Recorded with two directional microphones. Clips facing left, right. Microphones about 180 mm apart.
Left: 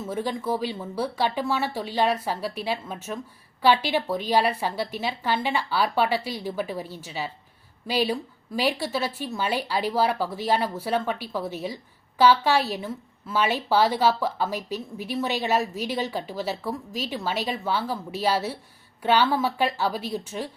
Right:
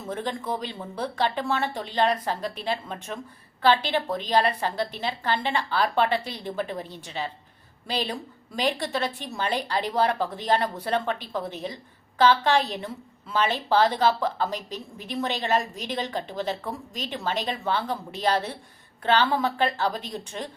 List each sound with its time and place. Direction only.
0.1 s a woman's voice: 10° left (ahead or behind)